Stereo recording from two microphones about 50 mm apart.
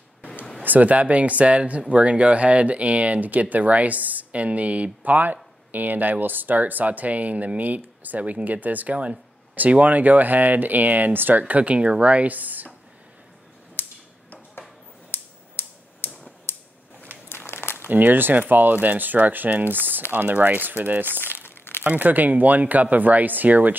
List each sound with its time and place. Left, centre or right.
0.6 s speech: right
15.0 s a sound: left
17.3 s crumpling: left
17.8 s speech: right
21.2 s crumpling: left
21.8 s speech: right